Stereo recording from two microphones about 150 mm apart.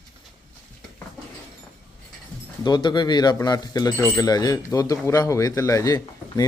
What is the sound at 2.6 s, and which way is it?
Speech, 30° left (ahead or behind).